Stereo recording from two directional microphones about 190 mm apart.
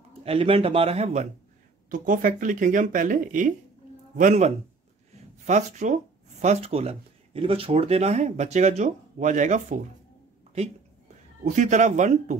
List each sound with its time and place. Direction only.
0.2 s speech: 30° right (ahead or behind)
11.4 s speech: 40° right (ahead or behind)